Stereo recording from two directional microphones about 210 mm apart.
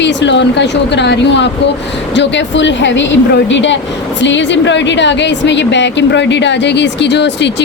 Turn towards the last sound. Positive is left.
turn(degrees=55)  # may be behind; listen again after turning